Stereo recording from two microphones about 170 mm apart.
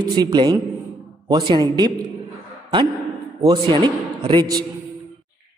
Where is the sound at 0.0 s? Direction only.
25° right (ahead or behind).